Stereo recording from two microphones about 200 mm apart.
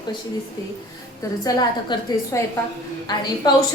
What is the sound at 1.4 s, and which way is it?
A woman's voice, 20° left (ahead or behind).